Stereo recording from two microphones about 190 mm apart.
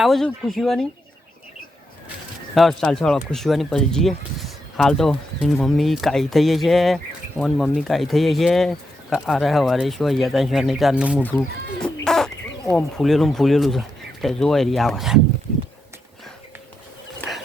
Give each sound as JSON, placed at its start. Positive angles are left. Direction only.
{"t": 0.0, "sound": "speech", "side_deg": 0}
{"t": 2.6, "sound": "speech", "side_deg": 0}
{"t": 11.2, "sound": "speech", "side_deg": 10}
{"t": 12.0, "sound": "bird", "side_deg": 5}
{"t": 12.7, "sound": "speech", "side_deg": 0}
{"t": 17.2, "sound": "a sound", "side_deg": 0}